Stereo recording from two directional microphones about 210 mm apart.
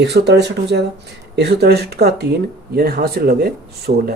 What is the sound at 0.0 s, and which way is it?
Speech, 50° right (ahead or behind).